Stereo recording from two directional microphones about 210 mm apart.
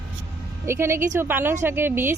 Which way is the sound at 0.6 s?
10° right (ahead or behind).